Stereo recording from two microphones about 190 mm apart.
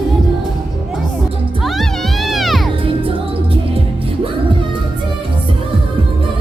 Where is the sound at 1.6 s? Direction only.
Centre (ahead or behind).